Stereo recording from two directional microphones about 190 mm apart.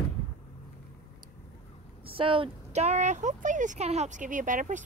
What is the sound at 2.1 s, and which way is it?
Speech, 30° right (ahead or behind).